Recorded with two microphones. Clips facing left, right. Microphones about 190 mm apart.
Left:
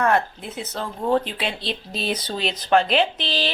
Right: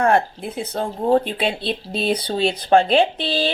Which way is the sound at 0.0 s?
30° right (ahead or behind).